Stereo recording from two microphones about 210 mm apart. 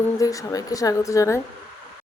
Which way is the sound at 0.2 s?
15° left (ahead or behind).